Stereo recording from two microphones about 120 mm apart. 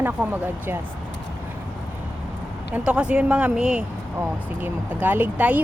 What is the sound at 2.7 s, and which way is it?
Speech, 10° right (ahead or behind).